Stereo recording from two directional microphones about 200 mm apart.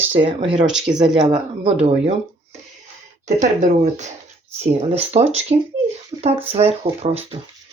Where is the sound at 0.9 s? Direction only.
25° right (ahead or behind).